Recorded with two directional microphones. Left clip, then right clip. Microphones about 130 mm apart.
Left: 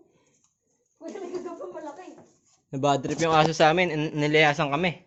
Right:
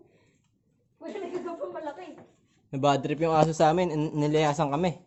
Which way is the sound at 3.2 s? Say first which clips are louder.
Left 2 dB; 20° right (ahead or behind).